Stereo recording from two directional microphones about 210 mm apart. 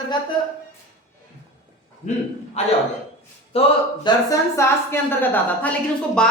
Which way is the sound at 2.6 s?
30° left (ahead or behind).